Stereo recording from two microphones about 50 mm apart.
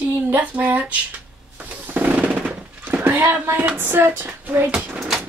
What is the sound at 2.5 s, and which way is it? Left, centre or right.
Gunshot, right.